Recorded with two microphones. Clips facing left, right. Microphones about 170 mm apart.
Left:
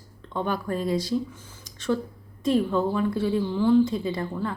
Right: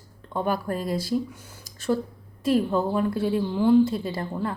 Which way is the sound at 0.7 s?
45° right (ahead or behind).